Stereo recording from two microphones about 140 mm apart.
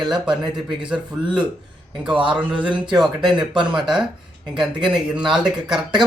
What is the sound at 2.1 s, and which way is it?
Speech, 35° right (ahead or behind).